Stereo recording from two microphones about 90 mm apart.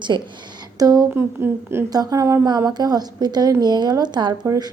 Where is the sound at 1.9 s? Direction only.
40° right (ahead or behind).